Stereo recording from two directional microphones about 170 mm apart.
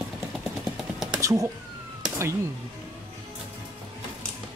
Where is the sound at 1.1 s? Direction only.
15° right (ahead or behind).